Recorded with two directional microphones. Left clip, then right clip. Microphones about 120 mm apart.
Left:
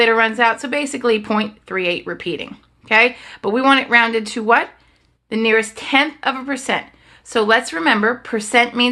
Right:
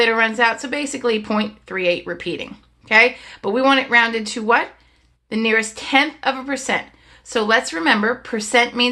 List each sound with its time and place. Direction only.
0.0 s speech: 25° left (ahead or behind)
2.9 s speech: 35° left (ahead or behind)